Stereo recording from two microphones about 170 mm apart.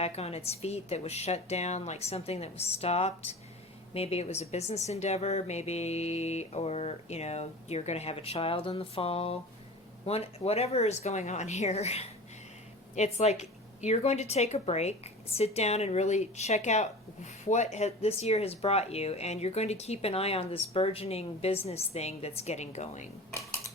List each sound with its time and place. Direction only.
0.0 s a woman's voice: 35° left (ahead or behind)